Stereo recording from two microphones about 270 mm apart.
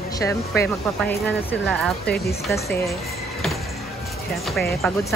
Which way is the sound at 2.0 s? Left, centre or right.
Left.